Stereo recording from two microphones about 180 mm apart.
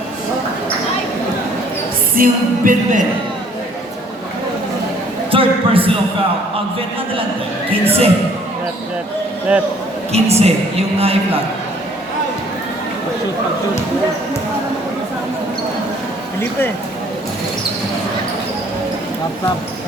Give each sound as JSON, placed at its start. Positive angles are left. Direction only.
{"t": 2.1, "sound": "music", "side_deg": -50}
{"t": 5.3, "sound": "a sound", "side_deg": -30}
{"t": 7.7, "sound": "a woman's voice", "side_deg": -35}
{"t": 9.5, "sound": "a man's voice", "side_deg": -5}
{"t": 10.1, "sound": "a woman's voice", "side_deg": -35}